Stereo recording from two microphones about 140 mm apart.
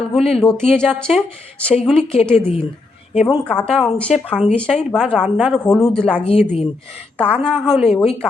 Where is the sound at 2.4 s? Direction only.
50° left (ahead or behind).